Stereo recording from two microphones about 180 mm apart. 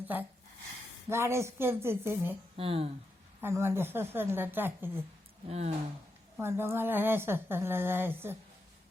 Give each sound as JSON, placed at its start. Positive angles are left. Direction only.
{"t": 0.0, "sound": "a woman's voice", "side_deg": -10}
{"t": 2.6, "sound": "speech", "side_deg": -30}
{"t": 3.4, "sound": "a woman's voice", "side_deg": -15}
{"t": 5.5, "sound": "speech", "side_deg": -35}
{"t": 6.3, "sound": "a woman's voice", "side_deg": -15}